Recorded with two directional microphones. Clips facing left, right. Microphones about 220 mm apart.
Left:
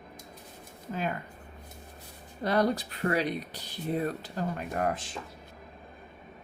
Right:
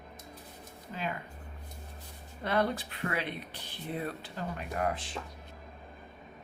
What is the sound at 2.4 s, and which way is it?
Speech, 40° left (ahead or behind).